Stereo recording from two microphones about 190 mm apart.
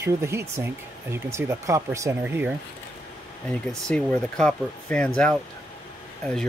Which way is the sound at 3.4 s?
5° left (ahead or behind).